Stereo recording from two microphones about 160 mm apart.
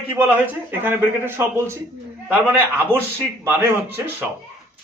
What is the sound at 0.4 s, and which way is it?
Speech, 10° right (ahead or behind).